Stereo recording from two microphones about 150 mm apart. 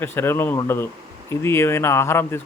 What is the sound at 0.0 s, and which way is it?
Speech, 15° left (ahead or behind).